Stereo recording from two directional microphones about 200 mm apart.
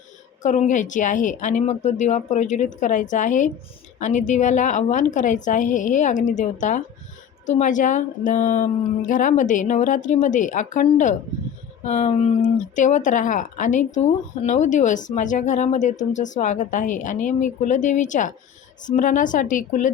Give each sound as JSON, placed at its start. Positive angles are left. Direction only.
{"t": 0.4, "sound": "speech", "side_deg": 35}